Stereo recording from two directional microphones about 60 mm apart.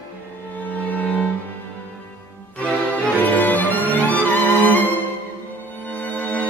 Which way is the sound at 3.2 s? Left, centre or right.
Left.